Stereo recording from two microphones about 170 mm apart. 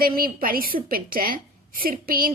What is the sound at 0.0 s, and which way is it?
A woman's voice, 60° right (ahead or behind).